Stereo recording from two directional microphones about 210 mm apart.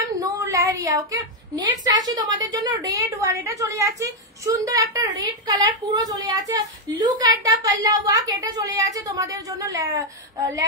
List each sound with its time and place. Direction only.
0.2 s a woman's voice: 15° right (ahead or behind)